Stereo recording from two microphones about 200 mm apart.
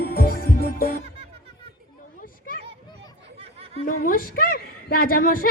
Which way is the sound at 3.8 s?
45° left (ahead or behind).